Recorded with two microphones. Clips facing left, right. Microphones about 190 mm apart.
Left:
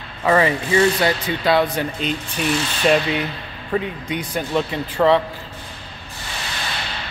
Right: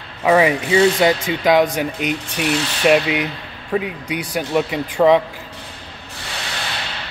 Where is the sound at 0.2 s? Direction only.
10° right (ahead or behind).